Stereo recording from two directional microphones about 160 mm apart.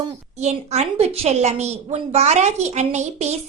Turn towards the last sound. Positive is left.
turn(degrees=-45)  # may be behind; listen again after turning